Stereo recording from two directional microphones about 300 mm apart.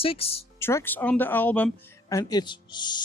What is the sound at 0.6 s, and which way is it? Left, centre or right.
Speech, centre.